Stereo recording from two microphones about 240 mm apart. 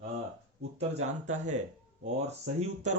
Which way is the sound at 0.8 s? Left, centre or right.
Right.